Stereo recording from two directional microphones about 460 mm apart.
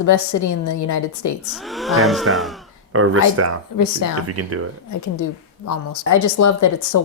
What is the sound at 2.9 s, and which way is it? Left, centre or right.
Speech, right.